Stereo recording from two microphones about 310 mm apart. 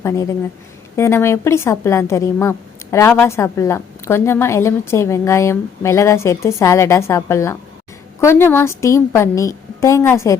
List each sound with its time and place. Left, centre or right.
0.0 s a woman's voice: centre